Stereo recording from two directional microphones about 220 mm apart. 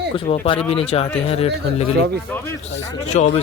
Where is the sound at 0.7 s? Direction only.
25° left (ahead or behind).